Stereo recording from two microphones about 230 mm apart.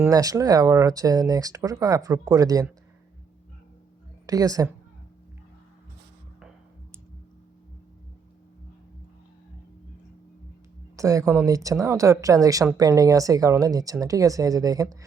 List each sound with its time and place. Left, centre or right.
0.0 s speech: centre
4.3 s speech: centre
10.9 s speech: centre